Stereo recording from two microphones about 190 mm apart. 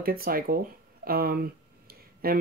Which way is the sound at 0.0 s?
50° right (ahead or behind).